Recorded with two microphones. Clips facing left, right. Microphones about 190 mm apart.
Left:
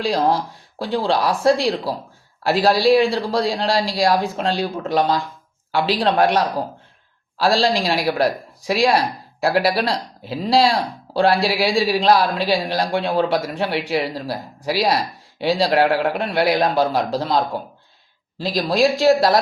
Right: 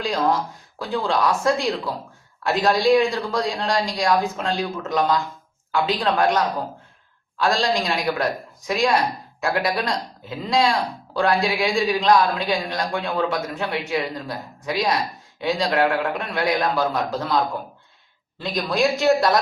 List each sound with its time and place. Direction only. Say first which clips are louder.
0.0 s a man's voice: left 3 dB; 30° left (ahead or behind)